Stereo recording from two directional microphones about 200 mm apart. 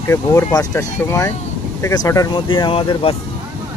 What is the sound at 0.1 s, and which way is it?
Speech, 15° left (ahead or behind).